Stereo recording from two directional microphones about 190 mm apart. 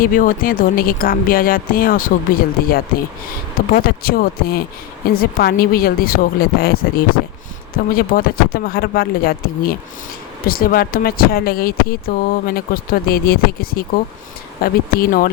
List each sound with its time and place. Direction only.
0.0 s speech: 45° left (ahead or behind)